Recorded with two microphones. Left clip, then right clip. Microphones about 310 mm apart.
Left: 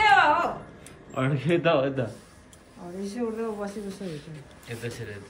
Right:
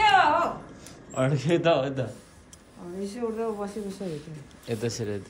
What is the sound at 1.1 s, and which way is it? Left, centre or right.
Speech, centre.